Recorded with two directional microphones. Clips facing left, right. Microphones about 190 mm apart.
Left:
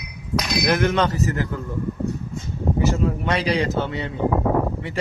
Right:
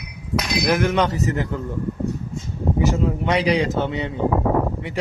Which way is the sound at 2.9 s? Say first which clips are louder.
Right 2 dB; 15° right (ahead or behind).